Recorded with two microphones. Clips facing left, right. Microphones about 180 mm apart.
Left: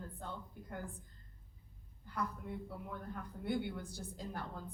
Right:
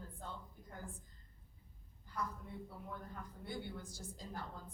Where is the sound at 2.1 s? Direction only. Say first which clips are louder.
Left 3 dB; 60° left (ahead or behind).